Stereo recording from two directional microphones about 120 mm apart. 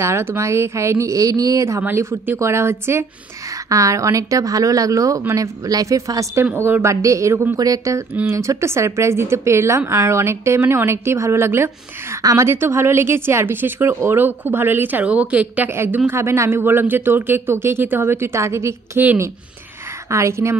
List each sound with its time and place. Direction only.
0.0 s speech: 20° right (ahead or behind)
6.4 s speech: 15° right (ahead or behind)